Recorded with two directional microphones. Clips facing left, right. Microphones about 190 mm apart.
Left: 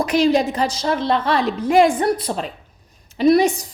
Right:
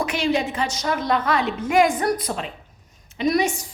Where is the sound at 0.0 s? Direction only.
40° left (ahead or behind).